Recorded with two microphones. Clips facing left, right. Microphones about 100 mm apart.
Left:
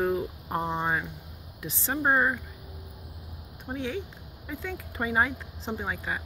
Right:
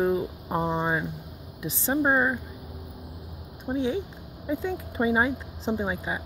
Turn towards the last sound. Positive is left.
turn(degrees=-15)  # may be behind; listen again after turning